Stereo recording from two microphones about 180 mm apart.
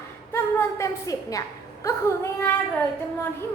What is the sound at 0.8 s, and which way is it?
A woman's voice, 20° left (ahead or behind).